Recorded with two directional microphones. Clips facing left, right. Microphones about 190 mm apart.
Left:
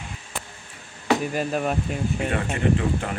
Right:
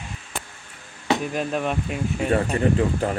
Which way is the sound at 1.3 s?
5° left (ahead or behind).